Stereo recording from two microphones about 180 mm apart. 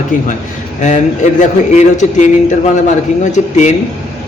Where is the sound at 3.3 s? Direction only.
40° left (ahead or behind).